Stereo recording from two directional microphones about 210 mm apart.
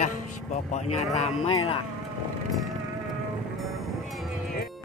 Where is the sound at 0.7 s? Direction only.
30° left (ahead or behind).